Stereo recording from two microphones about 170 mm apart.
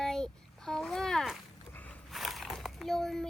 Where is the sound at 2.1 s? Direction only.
Centre (ahead or behind).